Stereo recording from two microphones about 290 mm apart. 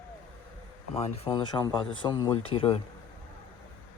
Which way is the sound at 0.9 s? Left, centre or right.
Centre.